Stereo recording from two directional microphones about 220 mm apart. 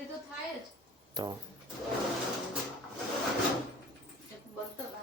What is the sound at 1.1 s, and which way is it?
Speech, 20° right (ahead or behind).